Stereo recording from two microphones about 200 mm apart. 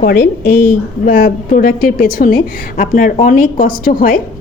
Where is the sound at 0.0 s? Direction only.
50° left (ahead or behind).